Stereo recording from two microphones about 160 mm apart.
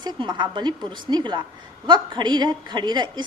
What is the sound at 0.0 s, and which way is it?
A woman's voice, 25° right (ahead or behind).